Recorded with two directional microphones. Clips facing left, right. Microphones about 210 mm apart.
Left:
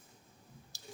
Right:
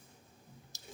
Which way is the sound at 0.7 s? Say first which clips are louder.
Left 1 dB; 20° right (ahead or behind).